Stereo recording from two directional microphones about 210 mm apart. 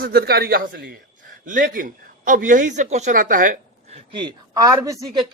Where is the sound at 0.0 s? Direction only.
50° right (ahead or behind).